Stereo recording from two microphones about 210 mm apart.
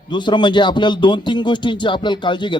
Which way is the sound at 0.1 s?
20° left (ahead or behind).